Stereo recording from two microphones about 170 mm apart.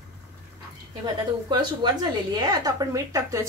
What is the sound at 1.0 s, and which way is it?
A woman's voice, 25° right (ahead or behind).